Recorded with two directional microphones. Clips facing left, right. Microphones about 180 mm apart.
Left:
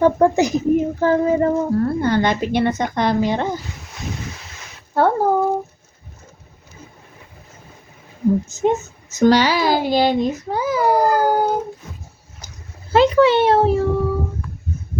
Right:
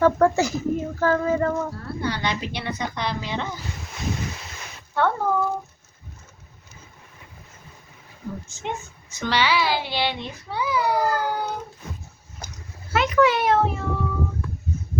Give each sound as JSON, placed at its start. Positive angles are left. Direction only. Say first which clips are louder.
{"t": 0.0, "sound": "speech", "louder": "left 4 dB", "side_deg": 15}
{"t": 1.7, "sound": "speech", "louder": "left 11 dB", "side_deg": 50}
{"t": 4.9, "sound": "a child's voice", "louder": "left 6 dB", "side_deg": 35}
{"t": 8.4, "sound": "speech", "louder": "left 13 dB", "side_deg": 40}
{"t": 12.4, "sound": "a sound", "louder": "right 3 dB", "side_deg": -55}
{"t": 12.9, "sound": "a child's voice", "louder": "left 6 dB", "side_deg": 30}